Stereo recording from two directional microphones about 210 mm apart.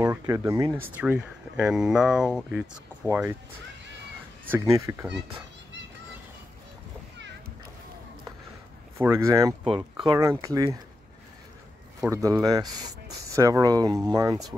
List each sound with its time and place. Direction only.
0.0 s speech: 10° right (ahead or behind)
4.5 s speech: 15° right (ahead or behind)
8.9 s speech: 10° right (ahead or behind)
9.7 s speech: 5° right (ahead or behind)
12.1 s speech: 15° right (ahead or behind)